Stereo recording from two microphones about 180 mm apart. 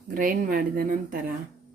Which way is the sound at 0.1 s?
50° right (ahead or behind).